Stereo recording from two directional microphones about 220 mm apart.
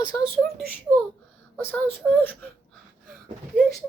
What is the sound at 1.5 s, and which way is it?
Speech, 10° left (ahead or behind).